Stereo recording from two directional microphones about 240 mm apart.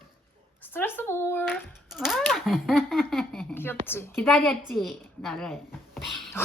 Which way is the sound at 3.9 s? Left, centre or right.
Centre.